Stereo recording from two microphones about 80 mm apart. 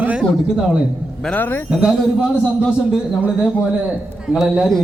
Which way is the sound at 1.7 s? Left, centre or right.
Centre.